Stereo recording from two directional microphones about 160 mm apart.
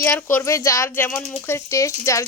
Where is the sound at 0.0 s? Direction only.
15° left (ahead or behind).